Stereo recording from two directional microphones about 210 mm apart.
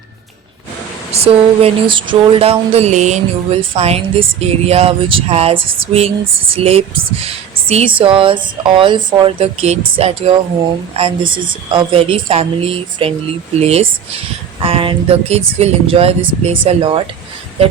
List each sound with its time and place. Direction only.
1.1 s speech: 30° right (ahead or behind)